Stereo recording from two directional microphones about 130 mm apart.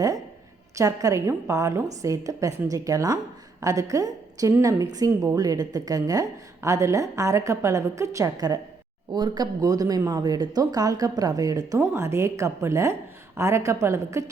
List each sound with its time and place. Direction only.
0.8 s a woman's voice: 25° right (ahead or behind)